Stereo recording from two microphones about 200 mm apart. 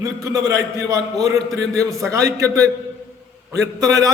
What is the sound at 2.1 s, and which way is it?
A man's voice, 15° right (ahead or behind).